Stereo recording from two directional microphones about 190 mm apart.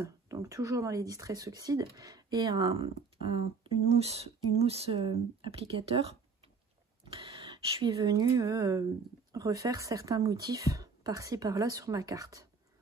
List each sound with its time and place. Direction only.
0.0 s speech: 15° right (ahead or behind)
7.2 s speech: 30° right (ahead or behind)